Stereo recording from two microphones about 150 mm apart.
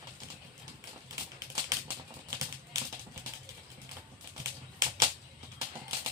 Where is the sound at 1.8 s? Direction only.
20° right (ahead or behind).